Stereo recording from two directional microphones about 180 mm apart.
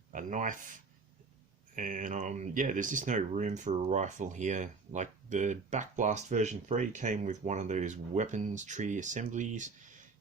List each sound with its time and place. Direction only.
0.1 s speech: 45° right (ahead or behind)